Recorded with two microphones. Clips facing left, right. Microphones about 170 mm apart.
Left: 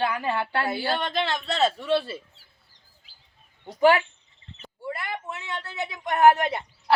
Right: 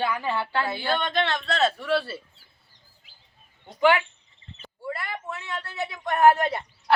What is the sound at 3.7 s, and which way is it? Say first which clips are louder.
Speech: left 2 dB; 40° left (ahead or behind).